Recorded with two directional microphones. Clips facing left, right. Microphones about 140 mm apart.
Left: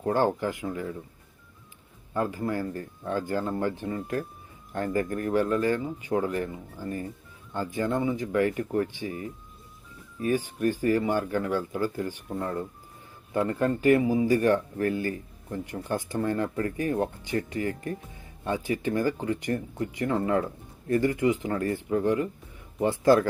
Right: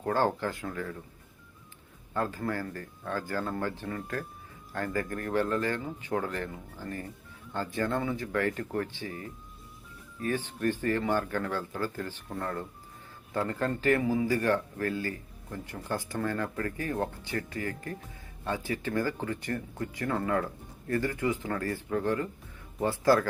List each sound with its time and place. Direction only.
0.0 s speech: 15° left (ahead or behind)
2.1 s speech: 15° left (ahead or behind)